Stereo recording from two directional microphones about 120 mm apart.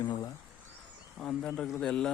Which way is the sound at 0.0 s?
35° left (ahead or behind).